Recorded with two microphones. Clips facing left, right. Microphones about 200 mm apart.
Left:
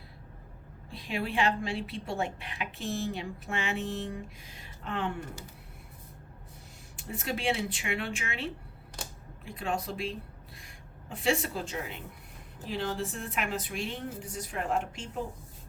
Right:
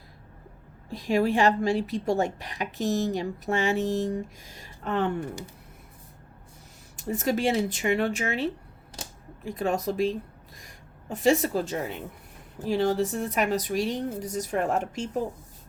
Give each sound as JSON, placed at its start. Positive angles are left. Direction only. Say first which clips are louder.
{"t": 0.9, "sound": "a woman's voice", "louder": "right 10 dB", "side_deg": -45}
{"t": 6.9, "sound": "a woman's voice", "louder": "right 9 dB", "side_deg": -40}